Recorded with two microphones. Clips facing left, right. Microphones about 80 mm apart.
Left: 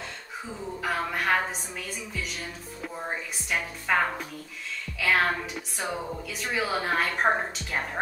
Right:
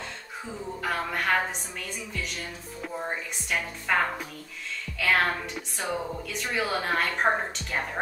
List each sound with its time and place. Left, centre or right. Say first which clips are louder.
0.8 s speech: left 1 dB; centre
2.8 s speech: right 1 dB; centre
5.0 s speech: even; centre